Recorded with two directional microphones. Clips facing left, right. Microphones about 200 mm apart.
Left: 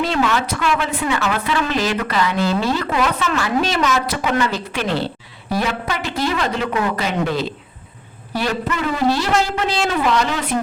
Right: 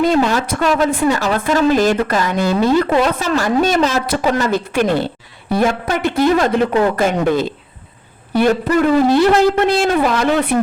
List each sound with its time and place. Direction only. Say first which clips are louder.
0.0 s a woman's voice: right 5 dB; 40° right (ahead or behind)
2.9 s a woman's voice: right 4 dB; 30° right (ahead or behind)
3.8 s a woman's voice: right 3 dB; 35° right (ahead or behind); by 10.5 s 55° right (ahead or behind)